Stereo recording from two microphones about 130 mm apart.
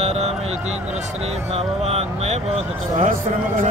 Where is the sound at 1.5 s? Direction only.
50° right (ahead or behind).